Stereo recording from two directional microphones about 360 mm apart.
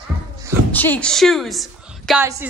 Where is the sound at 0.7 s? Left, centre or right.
Centre.